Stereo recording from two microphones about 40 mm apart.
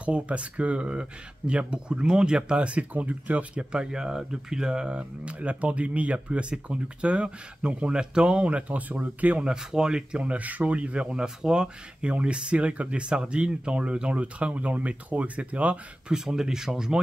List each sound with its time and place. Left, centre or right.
0.0 s speech: right
3.5 s speech: right
9.5 s speech: centre
10.2 s speech: right
11.1 s speech: centre; by 15.8 s right
16.1 s speech: centre